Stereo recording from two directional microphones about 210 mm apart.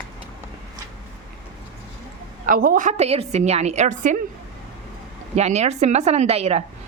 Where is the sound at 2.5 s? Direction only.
40° right (ahead or behind).